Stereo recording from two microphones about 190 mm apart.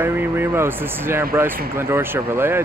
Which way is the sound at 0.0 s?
10° right (ahead or behind).